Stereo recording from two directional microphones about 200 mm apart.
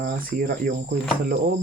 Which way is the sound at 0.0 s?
45° right (ahead or behind).